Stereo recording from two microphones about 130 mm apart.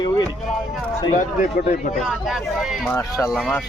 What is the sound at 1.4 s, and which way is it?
Speech, 85° left.